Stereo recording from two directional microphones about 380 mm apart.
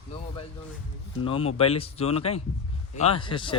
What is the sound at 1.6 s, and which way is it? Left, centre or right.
Speech, centre.